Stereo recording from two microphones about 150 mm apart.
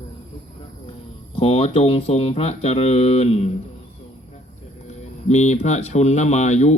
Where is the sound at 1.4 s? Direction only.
40° left (ahead or behind).